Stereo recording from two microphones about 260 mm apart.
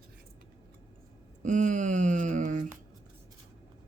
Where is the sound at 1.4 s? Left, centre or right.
Right.